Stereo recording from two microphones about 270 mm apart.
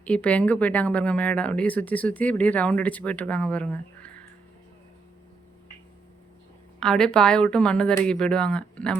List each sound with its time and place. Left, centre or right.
0.0 s speech: centre
6.7 s speech: centre